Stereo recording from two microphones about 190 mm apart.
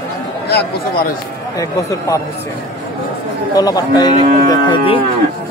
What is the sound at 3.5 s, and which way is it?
Speech, 20° left (ahead or behind).